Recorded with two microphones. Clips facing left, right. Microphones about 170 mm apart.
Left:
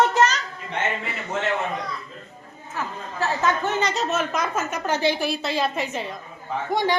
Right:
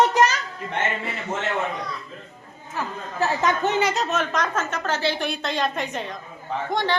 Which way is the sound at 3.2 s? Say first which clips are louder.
Right 1 dB; 15° right (ahead or behind).